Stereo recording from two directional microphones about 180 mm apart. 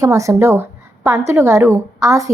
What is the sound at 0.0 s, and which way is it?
A woman's voice, 15° right (ahead or behind).